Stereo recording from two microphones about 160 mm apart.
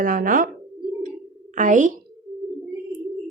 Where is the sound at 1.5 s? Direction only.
50° right (ahead or behind).